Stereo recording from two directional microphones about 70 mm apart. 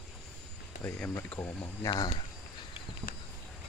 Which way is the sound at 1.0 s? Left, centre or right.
Left.